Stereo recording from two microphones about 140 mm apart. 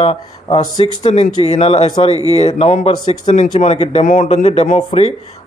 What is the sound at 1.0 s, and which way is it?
Speech, 50° left (ahead or behind).